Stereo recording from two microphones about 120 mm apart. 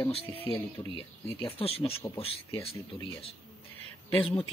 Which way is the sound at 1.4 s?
50° left (ahead or behind).